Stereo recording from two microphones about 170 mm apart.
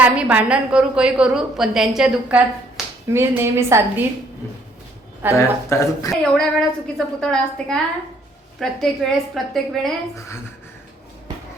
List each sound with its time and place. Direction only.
0.0 s a woman's voice: 10° right (ahead or behind)
3.1 s a woman's voice: 15° right (ahead or behind)
5.3 s speech: 15° left (ahead or behind)
6.1 s a woman's voice: centre (ahead or behind)
10.2 s speech: 15° left (ahead or behind)